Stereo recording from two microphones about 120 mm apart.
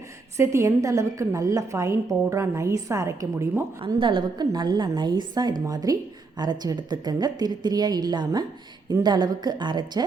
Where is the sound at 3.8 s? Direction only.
45° right (ahead or behind).